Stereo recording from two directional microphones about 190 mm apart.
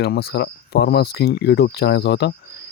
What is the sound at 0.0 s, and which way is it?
Speech, 55° left (ahead or behind).